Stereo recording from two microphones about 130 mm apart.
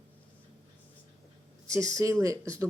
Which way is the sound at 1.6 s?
25° right (ahead or behind).